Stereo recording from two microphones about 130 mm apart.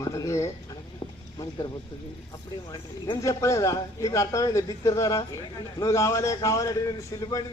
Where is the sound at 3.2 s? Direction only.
25° left (ahead or behind).